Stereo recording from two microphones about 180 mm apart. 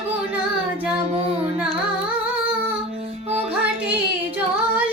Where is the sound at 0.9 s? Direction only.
30° right (ahead or behind).